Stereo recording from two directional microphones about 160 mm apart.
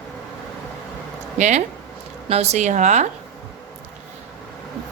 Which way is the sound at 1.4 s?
45° right (ahead or behind).